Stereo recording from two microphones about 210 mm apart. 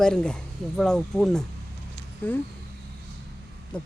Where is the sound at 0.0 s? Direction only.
5° left (ahead or behind).